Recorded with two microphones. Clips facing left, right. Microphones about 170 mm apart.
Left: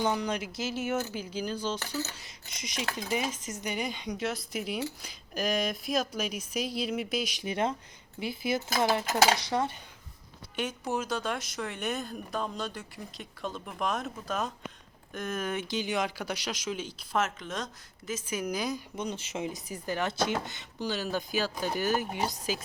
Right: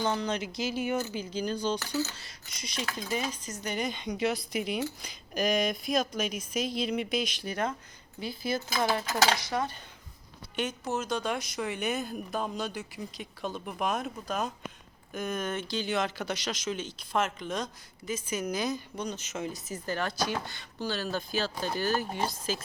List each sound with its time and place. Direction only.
0.0 s speech: 15° left (ahead or behind)
2.1 s cutlery: 20° left (ahead or behind)
3.7 s speech: 10° left (ahead or behind)
7.4 s cutlery: 20° left (ahead or behind)
10.5 s speech: 10° left (ahead or behind)
18.9 s cutlery: 25° left (ahead or behind)
19.4 s speech: 15° left (ahead or behind)